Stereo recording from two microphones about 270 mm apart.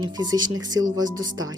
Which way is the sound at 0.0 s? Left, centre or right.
Centre.